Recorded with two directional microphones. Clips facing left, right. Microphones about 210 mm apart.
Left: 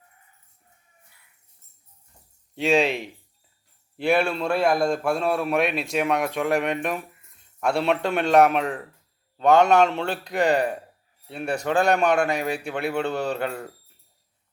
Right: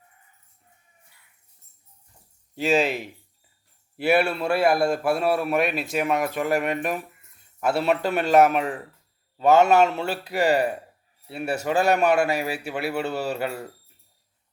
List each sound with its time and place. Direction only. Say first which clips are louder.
2.6 s a man's voice: left 1 dB; centre (ahead or behind)